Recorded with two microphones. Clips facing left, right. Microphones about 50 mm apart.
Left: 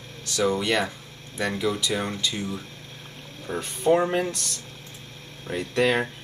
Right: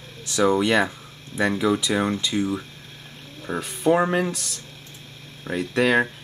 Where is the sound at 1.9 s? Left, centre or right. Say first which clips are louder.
Right 5 dB; right.